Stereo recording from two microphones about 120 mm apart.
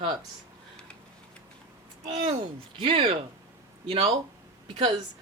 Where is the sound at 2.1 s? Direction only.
65° right (ahead or behind).